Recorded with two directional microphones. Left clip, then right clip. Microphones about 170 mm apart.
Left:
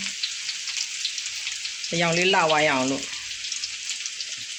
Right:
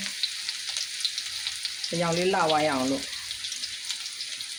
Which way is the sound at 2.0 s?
10° left (ahead or behind).